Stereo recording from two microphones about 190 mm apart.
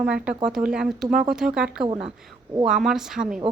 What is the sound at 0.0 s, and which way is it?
A woman's voice, 5° right (ahead or behind).